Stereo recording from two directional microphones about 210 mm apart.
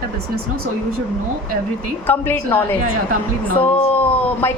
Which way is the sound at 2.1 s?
10° left (ahead or behind).